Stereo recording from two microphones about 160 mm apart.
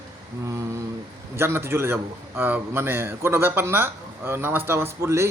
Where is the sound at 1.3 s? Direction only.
15° right (ahead or behind).